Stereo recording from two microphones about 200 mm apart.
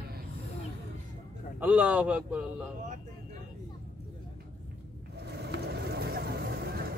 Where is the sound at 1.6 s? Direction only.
5° right (ahead or behind).